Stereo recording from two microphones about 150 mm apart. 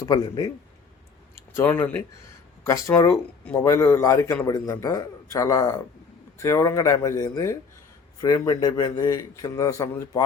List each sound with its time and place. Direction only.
0.0 s a man's voice: 25° left (ahead or behind)
1.4 s a man's voice: 15° left (ahead or behind)